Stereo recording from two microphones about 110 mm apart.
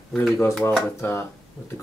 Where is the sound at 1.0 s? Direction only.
20° left (ahead or behind).